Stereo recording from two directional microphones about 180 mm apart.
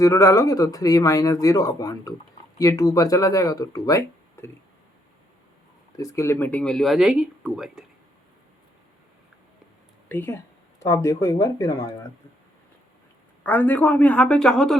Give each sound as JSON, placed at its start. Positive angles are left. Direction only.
{"t": 0.0, "sound": "speech", "side_deg": 15}
{"t": 6.0, "sound": "speech", "side_deg": 15}
{"t": 10.1, "sound": "speech", "side_deg": 10}
{"t": 13.4, "sound": "a woman's voice", "side_deg": 10}